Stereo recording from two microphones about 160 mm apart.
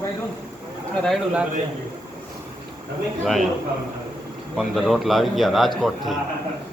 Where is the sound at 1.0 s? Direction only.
5° right (ahead or behind).